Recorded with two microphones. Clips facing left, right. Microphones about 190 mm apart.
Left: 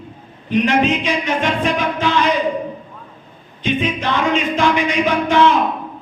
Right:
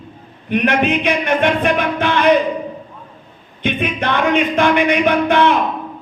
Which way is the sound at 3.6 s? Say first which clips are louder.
Even; 60° right (ahead or behind).